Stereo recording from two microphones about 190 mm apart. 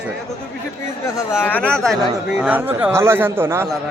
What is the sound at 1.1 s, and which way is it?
A man's voice, 10° left (ahead or behind).